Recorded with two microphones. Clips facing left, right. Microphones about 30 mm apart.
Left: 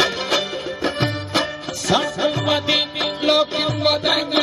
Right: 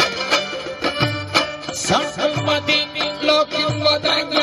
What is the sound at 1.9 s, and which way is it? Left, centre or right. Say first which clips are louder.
Music: even; centre.